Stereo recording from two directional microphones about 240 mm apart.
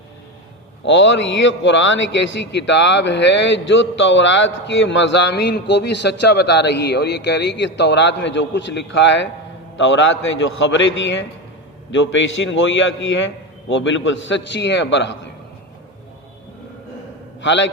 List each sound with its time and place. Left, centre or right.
0.9 s a man's voice: left
17.4 s a man's voice: left